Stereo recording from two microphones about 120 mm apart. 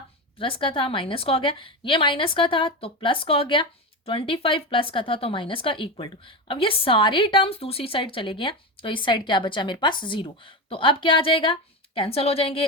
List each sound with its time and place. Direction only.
0.3 s a woman's voice: 45° left (ahead or behind)